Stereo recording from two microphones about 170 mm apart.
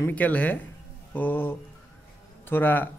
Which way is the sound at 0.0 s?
10° left (ahead or behind).